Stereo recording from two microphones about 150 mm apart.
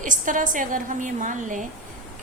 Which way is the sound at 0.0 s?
60° right (ahead or behind).